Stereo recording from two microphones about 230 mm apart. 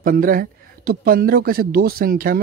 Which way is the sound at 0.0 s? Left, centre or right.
Right.